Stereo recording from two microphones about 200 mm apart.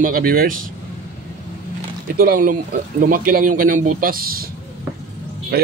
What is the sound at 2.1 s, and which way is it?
A man's voice, 45° right (ahead or behind).